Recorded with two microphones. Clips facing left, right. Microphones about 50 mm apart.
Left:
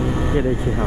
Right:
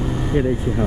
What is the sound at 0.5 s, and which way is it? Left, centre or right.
Speech, left.